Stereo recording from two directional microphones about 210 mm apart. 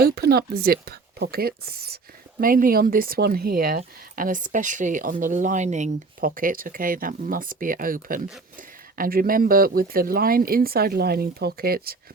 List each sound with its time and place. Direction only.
0.0 s speech: 45° right (ahead or behind)